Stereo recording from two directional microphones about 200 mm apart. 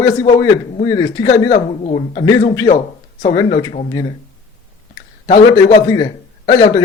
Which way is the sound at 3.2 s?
20° left (ahead or behind).